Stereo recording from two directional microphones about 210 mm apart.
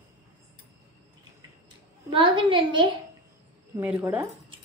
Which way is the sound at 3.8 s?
10° right (ahead or behind).